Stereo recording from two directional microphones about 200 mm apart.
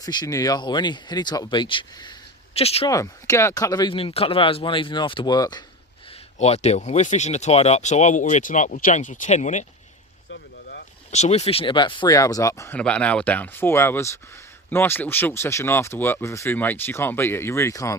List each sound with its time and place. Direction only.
0.0 s speech: 20° left (ahead or behind)
2.9 s speech: 15° left (ahead or behind)
6.4 s speech: 30° left (ahead or behind)
10.2 s boat: 55° left (ahead or behind)
11.1 s speech: 35° left (ahead or behind); by 17.9 s 15° left (ahead or behind)